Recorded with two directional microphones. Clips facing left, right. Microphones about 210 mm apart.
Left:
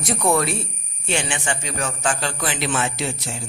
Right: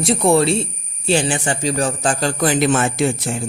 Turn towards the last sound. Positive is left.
turn(degrees=-55)  # may be behind; listen again after turning